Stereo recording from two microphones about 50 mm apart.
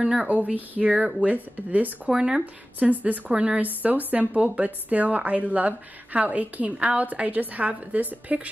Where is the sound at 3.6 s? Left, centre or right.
Right.